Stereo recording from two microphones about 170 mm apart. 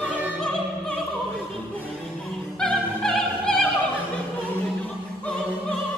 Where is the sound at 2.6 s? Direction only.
5° left (ahead or behind).